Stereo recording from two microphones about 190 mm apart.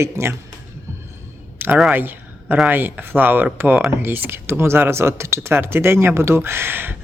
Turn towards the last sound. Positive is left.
turn(degrees=-10)  # may be behind; listen again after turning